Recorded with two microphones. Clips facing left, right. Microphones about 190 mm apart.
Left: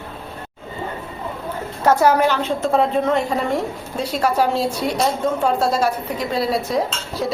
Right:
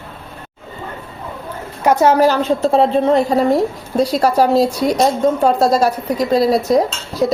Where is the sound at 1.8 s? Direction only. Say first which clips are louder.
Right 2 dB; 20° right (ahead or behind).